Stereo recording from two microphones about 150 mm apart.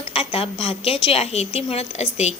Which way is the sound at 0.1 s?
40° left (ahead or behind).